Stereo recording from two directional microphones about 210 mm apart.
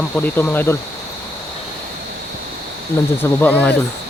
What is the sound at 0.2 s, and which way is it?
Speech, 10° left (ahead or behind).